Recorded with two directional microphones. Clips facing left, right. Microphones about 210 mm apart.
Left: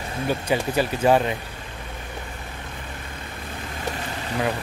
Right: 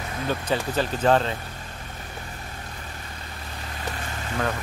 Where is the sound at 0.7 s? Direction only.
10° left (ahead or behind).